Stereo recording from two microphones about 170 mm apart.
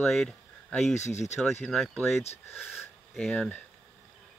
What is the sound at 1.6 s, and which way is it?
Speech, 5° left (ahead or behind).